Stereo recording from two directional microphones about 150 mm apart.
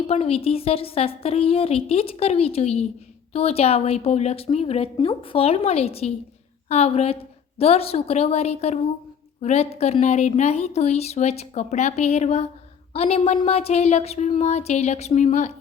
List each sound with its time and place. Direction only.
0.1 s a woman's voice: 40° left (ahead or behind)